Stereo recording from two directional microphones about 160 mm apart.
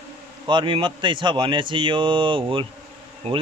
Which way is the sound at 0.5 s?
30° right (ahead or behind).